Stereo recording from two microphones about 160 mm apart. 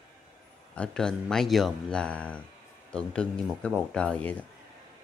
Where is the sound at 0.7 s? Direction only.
5° left (ahead or behind).